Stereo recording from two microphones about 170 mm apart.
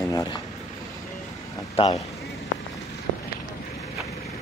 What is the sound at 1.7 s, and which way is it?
Speech, 40° left (ahead or behind).